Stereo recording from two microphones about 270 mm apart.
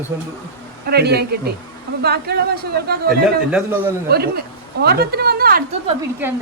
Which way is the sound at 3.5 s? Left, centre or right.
Centre.